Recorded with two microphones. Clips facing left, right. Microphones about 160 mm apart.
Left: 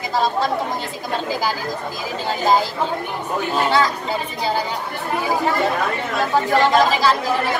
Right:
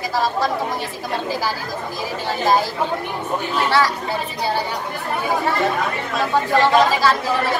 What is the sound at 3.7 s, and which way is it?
Speech, 20° left (ahead or behind).